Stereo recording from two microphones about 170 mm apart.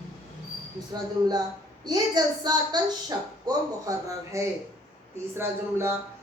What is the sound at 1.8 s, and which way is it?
A woman's voice, 25° right (ahead or behind).